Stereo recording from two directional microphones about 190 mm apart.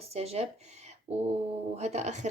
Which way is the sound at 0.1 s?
35° right (ahead or behind).